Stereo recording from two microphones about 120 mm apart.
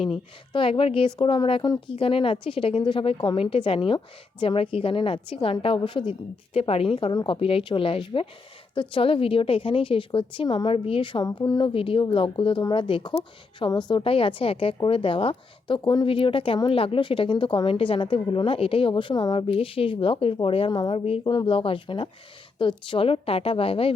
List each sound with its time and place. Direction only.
0.5 s a woman's voice: 50° left (ahead or behind)
11.3 s speech: 30° left (ahead or behind)
11.6 s a woman's voice: 50° left (ahead or behind)
20.9 s speech: 55° left (ahead or behind)
21.2 s a woman's voice: 40° left (ahead or behind)